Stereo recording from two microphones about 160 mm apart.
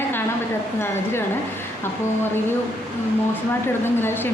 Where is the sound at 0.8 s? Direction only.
15° left (ahead or behind).